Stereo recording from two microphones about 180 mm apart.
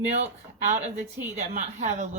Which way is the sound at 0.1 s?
40° right (ahead or behind).